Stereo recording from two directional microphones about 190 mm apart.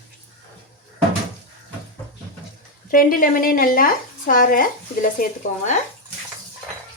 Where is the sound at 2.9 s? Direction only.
45° left (ahead or behind).